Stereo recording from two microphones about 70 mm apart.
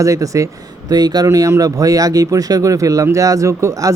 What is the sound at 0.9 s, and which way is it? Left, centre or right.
Speech, right.